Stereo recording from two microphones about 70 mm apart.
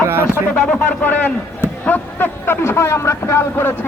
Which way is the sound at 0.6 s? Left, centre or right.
Left.